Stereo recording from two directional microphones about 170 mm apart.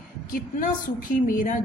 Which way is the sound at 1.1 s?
50° left (ahead or behind).